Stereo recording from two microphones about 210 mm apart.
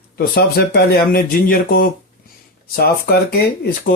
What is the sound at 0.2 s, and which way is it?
Speech, 50° left (ahead or behind).